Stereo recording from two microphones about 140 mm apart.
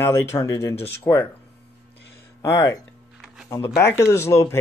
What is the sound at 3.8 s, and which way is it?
Speech, 20° left (ahead or behind).